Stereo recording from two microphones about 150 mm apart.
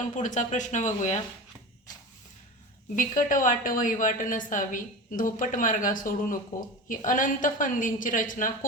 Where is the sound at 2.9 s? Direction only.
60° left (ahead or behind).